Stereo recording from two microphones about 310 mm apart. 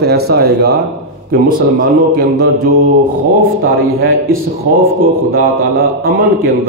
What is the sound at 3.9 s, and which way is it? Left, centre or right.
Speech, right.